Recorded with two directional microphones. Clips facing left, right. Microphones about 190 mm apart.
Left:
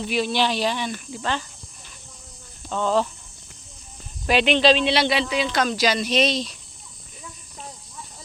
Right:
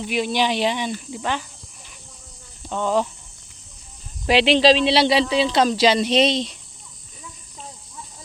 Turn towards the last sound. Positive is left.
turn(degrees=-25)  # may be behind; listen again after turning